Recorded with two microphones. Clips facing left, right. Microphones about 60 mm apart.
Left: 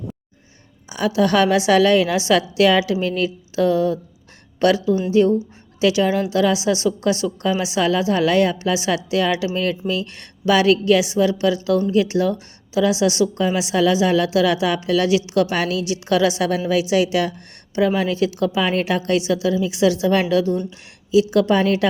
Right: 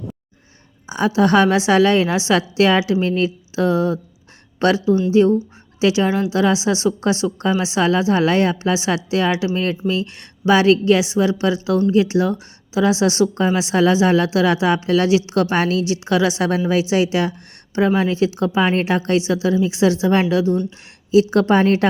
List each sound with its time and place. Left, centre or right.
0.9 s a woman's voice: right